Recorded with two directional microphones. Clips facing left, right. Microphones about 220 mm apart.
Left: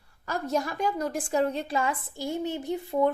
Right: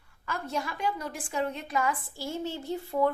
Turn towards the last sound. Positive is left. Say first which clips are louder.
# left 2 dB
turn(degrees=20)  # may be behind; listen again after turning